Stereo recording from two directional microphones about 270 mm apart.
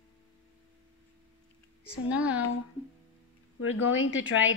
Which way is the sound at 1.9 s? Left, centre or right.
Centre.